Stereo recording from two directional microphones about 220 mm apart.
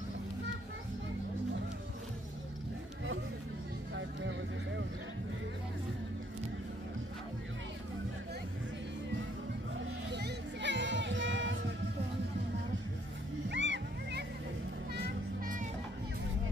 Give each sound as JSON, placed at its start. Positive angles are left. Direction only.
{"t": 3.9, "sound": "vehicle", "side_deg": -55}
{"t": 9.8, "sound": "music", "side_deg": -55}
{"t": 13.5, "sound": "music", "side_deg": -55}
{"t": 15.0, "sound": "music", "side_deg": -40}